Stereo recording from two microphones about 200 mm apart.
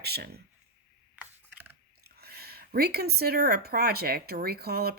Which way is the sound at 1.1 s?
10° right (ahead or behind).